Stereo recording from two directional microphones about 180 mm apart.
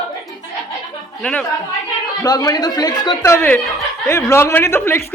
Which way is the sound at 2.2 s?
20° left (ahead or behind).